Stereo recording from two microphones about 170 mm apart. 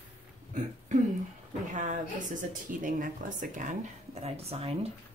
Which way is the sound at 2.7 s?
50° right (ahead or behind).